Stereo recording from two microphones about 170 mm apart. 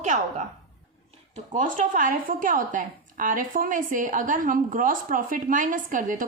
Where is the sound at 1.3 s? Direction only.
45° right (ahead or behind).